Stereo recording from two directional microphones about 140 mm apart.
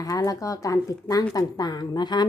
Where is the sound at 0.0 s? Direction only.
25° left (ahead or behind).